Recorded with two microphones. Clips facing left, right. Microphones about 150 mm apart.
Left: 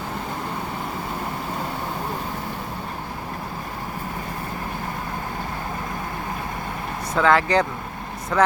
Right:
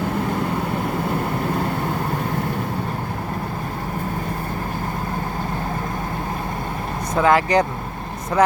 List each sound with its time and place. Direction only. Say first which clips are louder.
7.2 s speech: right 2 dB; 15° right (ahead or behind)